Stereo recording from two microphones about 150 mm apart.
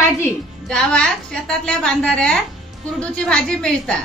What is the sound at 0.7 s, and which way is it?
A woman's voice, 5° left (ahead or behind).